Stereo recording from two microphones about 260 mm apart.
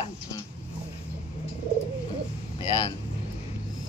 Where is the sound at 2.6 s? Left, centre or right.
Centre.